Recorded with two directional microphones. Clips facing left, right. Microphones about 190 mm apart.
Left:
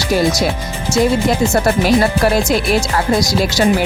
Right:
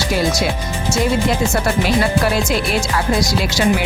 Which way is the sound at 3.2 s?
40° left (ahead or behind).